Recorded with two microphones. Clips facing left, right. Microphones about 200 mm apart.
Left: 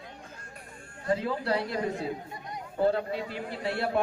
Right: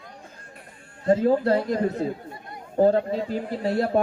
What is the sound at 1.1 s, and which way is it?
A man's voice, 45° right (ahead or behind).